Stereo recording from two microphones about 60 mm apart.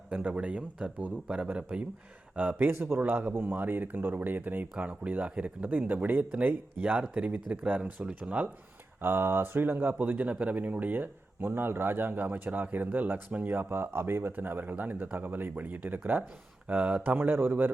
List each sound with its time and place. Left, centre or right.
0.1 s speech: right
7.4 s speech: centre
9.0 s speech: right
17.2 s speech: right